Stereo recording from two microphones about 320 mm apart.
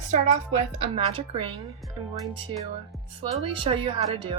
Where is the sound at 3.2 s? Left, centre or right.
Centre.